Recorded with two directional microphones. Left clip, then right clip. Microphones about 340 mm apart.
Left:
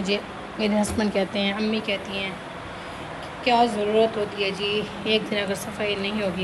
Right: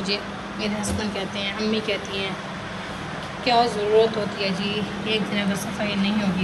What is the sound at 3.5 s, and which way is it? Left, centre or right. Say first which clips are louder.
Speech: right 1 dB; centre.